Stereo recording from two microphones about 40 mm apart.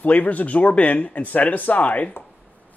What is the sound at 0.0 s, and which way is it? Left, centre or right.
Speech, left.